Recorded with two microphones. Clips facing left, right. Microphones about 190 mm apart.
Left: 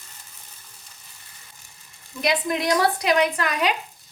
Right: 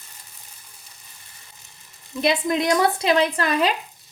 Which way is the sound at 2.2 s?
25° right (ahead or behind).